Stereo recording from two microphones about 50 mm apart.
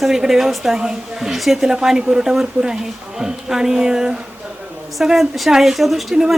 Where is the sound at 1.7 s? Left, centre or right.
Centre.